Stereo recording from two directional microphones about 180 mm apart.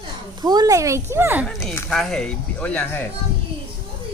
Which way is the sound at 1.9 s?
Centre (ahead or behind).